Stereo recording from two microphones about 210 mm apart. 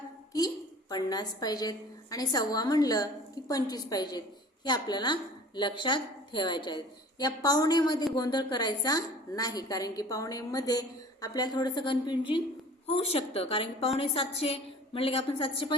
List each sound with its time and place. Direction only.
0.3 s a woman's voice: 20° left (ahead or behind)